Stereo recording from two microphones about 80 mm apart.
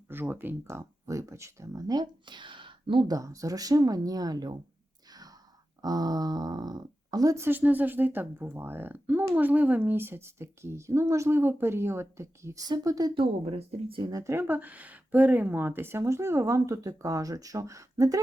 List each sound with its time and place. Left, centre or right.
0.1 s speech: right
1.9 s speech: right
3.1 s speech: right
5.8 s speech: right
7.3 s speech: right
12.6 s speech: right
14.3 s speech: right